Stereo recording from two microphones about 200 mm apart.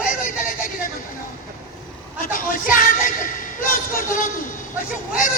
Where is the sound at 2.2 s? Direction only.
40° left (ahead or behind).